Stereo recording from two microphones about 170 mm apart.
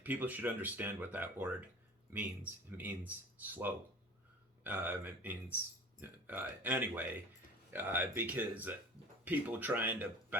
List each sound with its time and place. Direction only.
0.0 s speech: 10° right (ahead or behind)